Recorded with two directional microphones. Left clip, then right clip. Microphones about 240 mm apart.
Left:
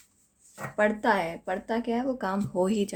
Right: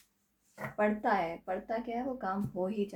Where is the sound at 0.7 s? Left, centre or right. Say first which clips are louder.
Left 6 dB; left.